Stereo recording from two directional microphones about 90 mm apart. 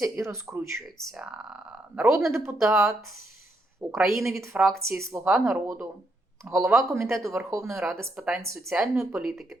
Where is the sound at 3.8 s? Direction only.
40° right (ahead or behind).